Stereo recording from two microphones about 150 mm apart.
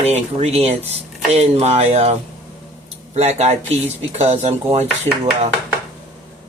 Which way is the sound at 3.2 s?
50° right (ahead or behind).